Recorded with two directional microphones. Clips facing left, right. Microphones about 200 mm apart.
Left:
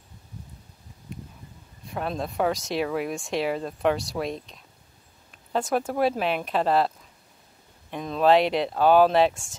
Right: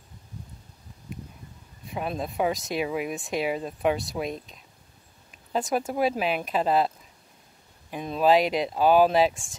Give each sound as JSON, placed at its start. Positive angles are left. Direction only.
{"t": 1.9, "sound": "speech", "side_deg": -5}
{"t": 7.9, "sound": "speech", "side_deg": -5}
{"t": 9.3, "sound": "speech", "side_deg": 45}